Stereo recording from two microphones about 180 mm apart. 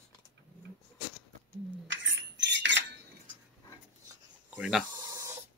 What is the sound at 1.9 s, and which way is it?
Cutlery, 90° right.